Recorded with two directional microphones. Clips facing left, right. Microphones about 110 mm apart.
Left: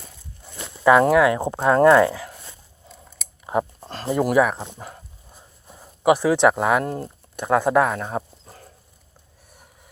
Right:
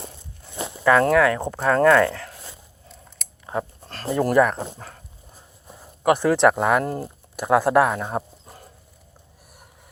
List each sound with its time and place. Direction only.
0.9 s speech: 15° left (ahead or behind)
2.9 s scissors: 5° left (ahead or behind)
3.4 s a sound: 20° left (ahead or behind)
4.2 s speech: 5° left (ahead or behind)